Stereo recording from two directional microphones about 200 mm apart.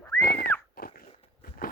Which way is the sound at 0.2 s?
50° left (ahead or behind).